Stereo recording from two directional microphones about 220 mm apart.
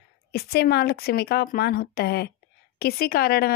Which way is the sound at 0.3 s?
45° left (ahead or behind).